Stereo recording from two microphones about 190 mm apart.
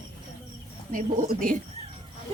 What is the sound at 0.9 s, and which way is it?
Speech, 45° right (ahead or behind).